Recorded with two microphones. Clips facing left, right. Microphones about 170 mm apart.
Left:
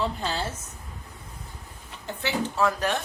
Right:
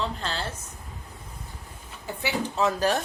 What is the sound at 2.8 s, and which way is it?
Speech, 35° right (ahead or behind).